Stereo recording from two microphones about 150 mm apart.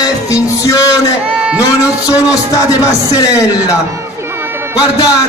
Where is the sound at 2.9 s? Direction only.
20° left (ahead or behind).